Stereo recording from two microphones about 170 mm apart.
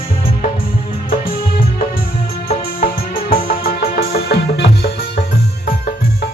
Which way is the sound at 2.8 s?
60° left (ahead or behind).